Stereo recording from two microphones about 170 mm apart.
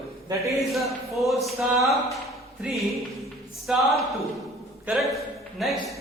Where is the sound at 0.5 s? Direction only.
Centre (ahead or behind).